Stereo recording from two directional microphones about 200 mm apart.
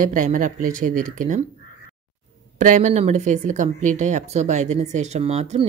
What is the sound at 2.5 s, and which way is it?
Speech, 35° right (ahead or behind).